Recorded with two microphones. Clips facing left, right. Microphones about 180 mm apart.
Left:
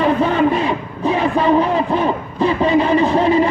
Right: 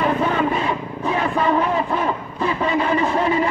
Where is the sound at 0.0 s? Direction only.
25° left (ahead or behind).